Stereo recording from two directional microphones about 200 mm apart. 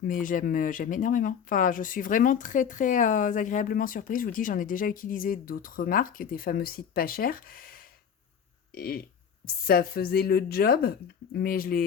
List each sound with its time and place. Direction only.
0.0 s speech: 40° left (ahead or behind)
8.7 s a sound: 50° left (ahead or behind)
9.6 s speech: 50° left (ahead or behind)